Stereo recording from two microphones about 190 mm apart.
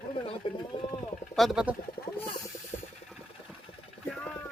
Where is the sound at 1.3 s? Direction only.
Centre (ahead or behind).